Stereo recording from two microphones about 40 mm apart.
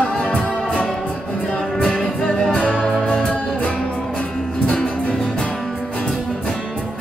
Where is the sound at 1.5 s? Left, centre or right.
Centre.